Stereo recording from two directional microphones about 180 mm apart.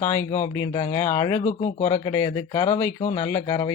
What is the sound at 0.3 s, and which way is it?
Speech, 15° left (ahead or behind).